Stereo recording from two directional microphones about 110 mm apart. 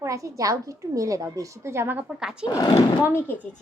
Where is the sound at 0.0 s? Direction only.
30° right (ahead or behind); by 2.4 s 5° right (ahead or behind).